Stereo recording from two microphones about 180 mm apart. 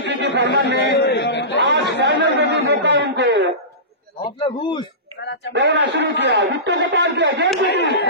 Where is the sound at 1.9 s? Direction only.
75° right (ahead or behind).